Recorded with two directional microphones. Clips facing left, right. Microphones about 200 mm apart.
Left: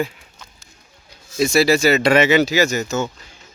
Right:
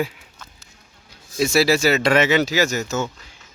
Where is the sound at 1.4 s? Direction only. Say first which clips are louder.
Left 2 dB; 5° right (ahead or behind).